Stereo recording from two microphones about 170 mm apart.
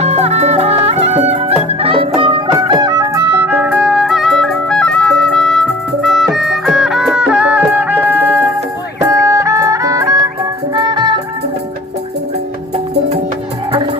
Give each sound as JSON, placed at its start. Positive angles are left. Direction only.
{"t": 0.0, "sound": "music", "side_deg": -40}